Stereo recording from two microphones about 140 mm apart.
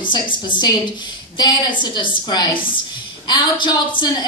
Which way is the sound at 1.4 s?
30° left (ahead or behind).